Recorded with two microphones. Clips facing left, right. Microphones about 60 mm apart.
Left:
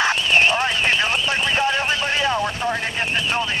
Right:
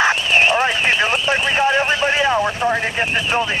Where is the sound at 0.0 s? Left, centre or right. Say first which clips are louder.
Right 2 dB; right.